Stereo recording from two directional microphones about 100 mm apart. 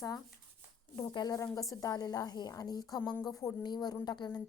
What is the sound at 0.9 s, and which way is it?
A woman's voice, 45° left (ahead or behind).